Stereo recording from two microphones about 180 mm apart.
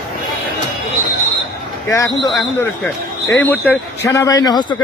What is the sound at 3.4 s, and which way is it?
A man's voice, 10° left (ahead or behind).